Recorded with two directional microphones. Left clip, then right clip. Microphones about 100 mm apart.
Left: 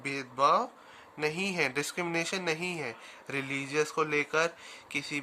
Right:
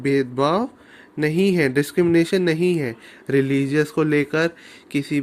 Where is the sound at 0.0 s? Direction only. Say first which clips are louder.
Right 8 dB; 40° right (ahead or behind).